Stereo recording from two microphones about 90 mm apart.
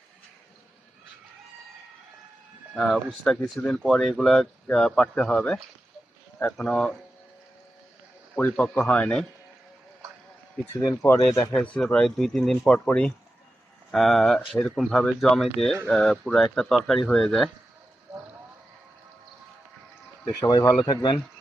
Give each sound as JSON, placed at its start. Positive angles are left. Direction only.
{"t": 2.7, "sound": "speech", "side_deg": 5}
{"t": 8.5, "sound": "speech", "side_deg": 10}
{"t": 10.8, "sound": "speech", "side_deg": 35}
{"t": 11.5, "sound": "speech", "side_deg": 15}
{"t": 13.9, "sound": "speech", "side_deg": 0}
{"t": 20.2, "sound": "speech", "side_deg": 55}